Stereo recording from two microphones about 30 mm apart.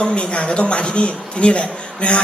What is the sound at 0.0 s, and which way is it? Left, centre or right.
A man's voice, left.